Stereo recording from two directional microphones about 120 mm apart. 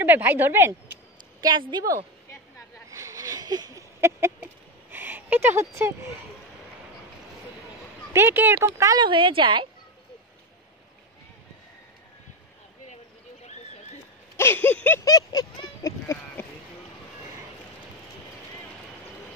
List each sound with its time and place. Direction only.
0.0 s speech: 15° right (ahead or behind)
1.4 s a woman's voice: 35° right (ahead or behind)
2.9 s a sound: 25° right (ahead or behind)
4.9 s speech: 15° right (ahead or behind)
8.1 s speech: 15° right (ahead or behind)
9.0 s a woman's voice: 45° right (ahead or behind)
14.3 s a sound: 20° left (ahead or behind)
15.0 s speech: 30° left (ahead or behind)